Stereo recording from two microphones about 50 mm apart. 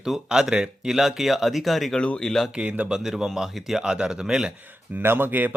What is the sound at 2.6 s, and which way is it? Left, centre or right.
Speech, right.